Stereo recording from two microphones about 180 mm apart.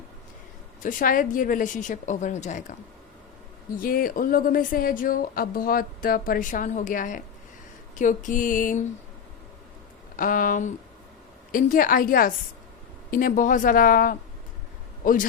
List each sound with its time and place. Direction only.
0.8 s speech: 50° left (ahead or behind)
3.8 s speech: 55° left (ahead or behind)
10.2 s speech: 50° left (ahead or behind)